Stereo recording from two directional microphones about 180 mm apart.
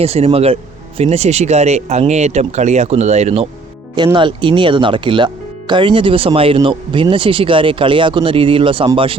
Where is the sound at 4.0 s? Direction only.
25° right (ahead or behind).